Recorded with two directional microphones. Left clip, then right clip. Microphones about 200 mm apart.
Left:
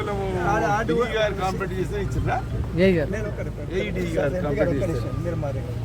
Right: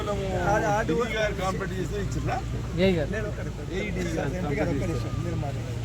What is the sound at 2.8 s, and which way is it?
Speech, 30° left (ahead or behind).